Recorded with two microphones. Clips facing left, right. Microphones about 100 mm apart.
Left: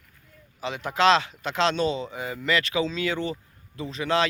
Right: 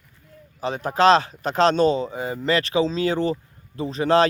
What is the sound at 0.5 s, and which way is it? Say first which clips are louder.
Speech: right 4 dB; 40° right (ahead or behind).